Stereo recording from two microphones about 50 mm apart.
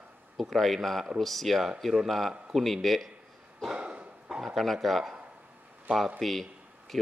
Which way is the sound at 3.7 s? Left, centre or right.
Right.